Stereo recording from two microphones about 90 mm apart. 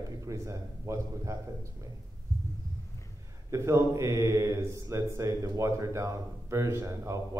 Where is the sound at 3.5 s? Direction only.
30° right (ahead or behind).